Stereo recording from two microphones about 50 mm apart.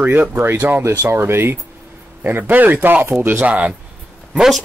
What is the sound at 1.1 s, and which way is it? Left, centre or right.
Speech, right.